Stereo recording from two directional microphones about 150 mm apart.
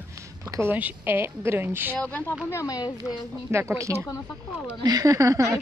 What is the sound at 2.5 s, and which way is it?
Speech, 20° left (ahead or behind).